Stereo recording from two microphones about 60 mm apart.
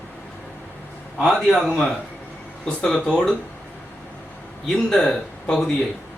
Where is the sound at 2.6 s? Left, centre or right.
Centre.